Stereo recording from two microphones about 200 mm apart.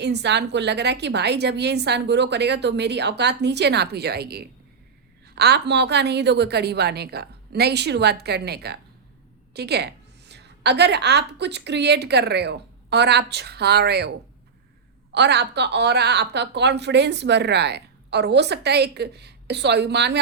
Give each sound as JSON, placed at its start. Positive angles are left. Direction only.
{"t": 0.0, "sound": "a woman's voice", "side_deg": -60}
{"t": 15.1, "sound": "a woman's voice", "side_deg": -60}